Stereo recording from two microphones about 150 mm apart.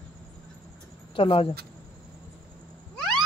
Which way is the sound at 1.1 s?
40° left (ahead or behind).